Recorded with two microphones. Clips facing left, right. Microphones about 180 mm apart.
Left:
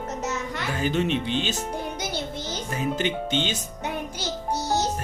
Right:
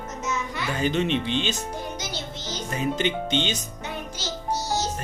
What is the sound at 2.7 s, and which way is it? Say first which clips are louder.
Speech: right 1 dB; 5° left (ahead or behind).